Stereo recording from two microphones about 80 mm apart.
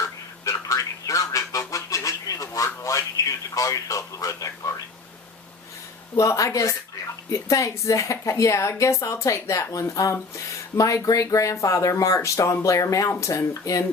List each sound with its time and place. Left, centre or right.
0.0 s telephone: left
2.8 s speech: left
6.1 s speech: left